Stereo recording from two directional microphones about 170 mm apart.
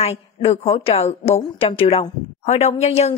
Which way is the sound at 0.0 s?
35° left (ahead or behind).